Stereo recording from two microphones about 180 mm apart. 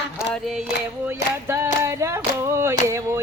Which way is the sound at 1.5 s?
15° right (ahead or behind).